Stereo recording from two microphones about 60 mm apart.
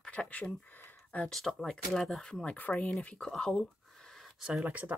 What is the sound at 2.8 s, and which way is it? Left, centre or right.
Speech, left.